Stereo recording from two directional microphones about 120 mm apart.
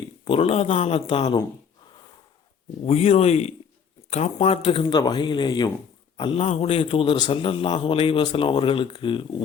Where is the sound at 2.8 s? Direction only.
60° left (ahead or behind).